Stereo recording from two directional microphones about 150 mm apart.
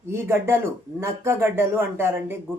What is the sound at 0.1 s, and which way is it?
Speech, 15° right (ahead or behind).